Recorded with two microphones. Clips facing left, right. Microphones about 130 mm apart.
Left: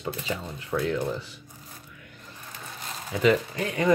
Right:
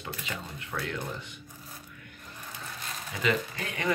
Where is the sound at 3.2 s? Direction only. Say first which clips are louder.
Left 7 dB; 30° left (ahead or behind).